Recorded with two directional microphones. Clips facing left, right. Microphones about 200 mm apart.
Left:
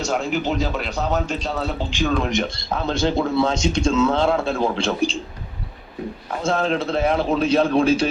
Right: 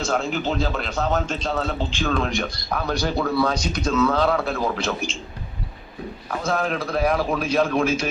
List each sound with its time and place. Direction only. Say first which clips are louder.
0.0 s a man's voice: left 1 dB; 15° left (ahead or behind); by 5.2 s 35° left (ahead or behind)
6.4 s a man's voice: left 3 dB; 25° left (ahead or behind)